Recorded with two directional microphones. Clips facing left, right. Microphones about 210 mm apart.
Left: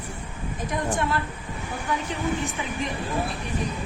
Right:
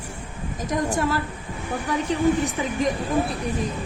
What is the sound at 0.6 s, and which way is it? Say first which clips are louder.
A woman's voice: right 3 dB; 40° right (ahead or behind).